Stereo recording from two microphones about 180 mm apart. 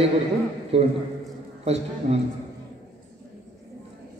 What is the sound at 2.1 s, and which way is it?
Speech, 35° right (ahead or behind).